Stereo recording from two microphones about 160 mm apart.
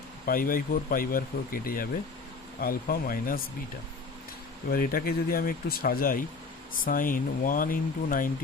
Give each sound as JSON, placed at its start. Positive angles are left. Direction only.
{"t": 0.3, "sound": "speech", "side_deg": 60}
{"t": 4.7, "sound": "speech", "side_deg": 65}